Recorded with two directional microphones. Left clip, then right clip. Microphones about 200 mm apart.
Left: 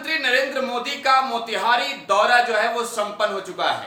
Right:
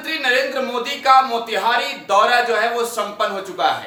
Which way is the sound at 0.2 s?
5° left (ahead or behind).